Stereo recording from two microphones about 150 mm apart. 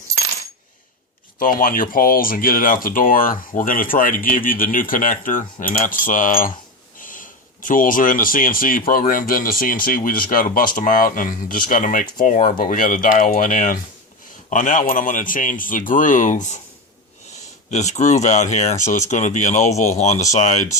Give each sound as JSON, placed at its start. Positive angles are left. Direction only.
{"t": 1.4, "sound": "speech", "side_deg": 70}
{"t": 17.7, "sound": "speech", "side_deg": 50}